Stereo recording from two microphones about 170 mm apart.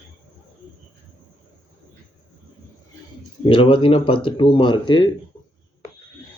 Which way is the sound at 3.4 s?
30° left (ahead or behind).